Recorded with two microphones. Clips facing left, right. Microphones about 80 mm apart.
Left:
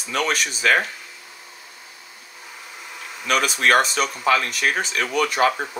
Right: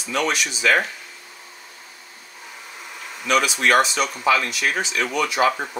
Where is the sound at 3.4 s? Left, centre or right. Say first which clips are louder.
Left 2 dB; left.